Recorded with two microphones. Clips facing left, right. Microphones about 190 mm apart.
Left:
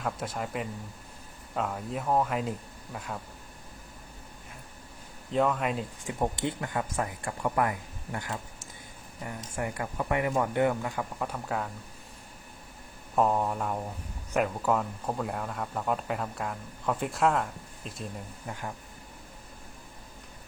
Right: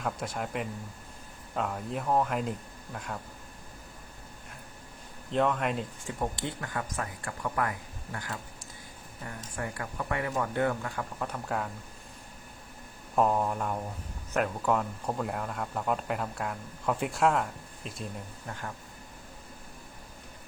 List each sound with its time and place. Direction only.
0.0 s speech: centre (ahead or behind)
5.3 s speech: centre (ahead or behind)
6.1 s speech: 20° left (ahead or behind)
9.6 s speech: 15° left (ahead or behind); by 11.7 s centre (ahead or behind)
13.1 s speech: centre (ahead or behind)
18.4 s speech: 15° left (ahead or behind)